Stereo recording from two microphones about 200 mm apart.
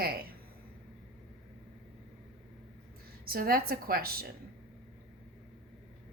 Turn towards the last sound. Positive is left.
turn(degrees=-50)  # may be behind; listen again after turning